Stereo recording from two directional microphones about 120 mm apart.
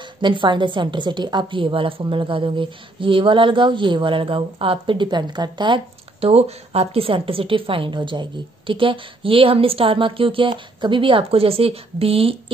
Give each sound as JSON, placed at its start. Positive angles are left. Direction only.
{"t": 0.2, "sound": "a woman's voice", "side_deg": -40}
{"t": 6.2, "sound": "a woman's voice", "side_deg": -60}